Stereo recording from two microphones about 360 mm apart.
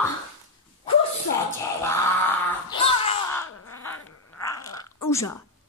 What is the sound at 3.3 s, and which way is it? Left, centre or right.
Crow, left.